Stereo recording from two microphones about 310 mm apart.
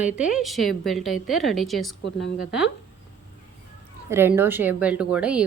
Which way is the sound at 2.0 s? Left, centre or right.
Left.